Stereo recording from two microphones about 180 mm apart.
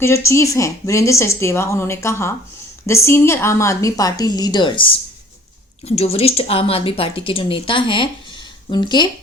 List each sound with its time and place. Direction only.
0.0 s speech: 15° left (ahead or behind)
6.0 s speech: 35° left (ahead or behind)